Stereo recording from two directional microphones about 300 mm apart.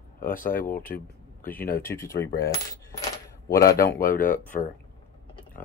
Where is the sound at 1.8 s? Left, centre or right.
Centre.